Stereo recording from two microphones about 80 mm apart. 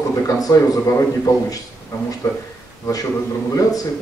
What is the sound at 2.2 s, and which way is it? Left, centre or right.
Speech, left.